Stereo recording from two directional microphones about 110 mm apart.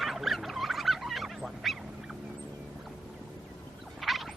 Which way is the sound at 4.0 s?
Centre (ahead or behind).